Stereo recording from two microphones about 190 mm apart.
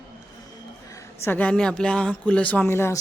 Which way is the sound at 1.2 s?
10° left (ahead or behind).